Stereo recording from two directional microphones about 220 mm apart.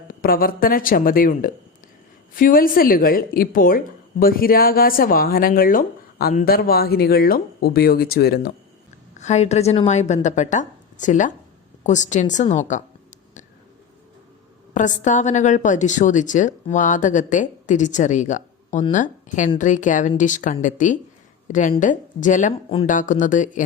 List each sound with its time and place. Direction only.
0.1 s speech: 40° left (ahead or behind)
9.1 s a woman's voice: 30° left (ahead or behind)
14.7 s speech: 35° left (ahead or behind)